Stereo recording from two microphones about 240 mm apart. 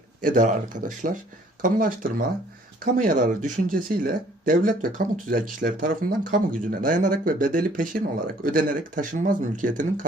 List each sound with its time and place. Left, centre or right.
0.2 s speech: right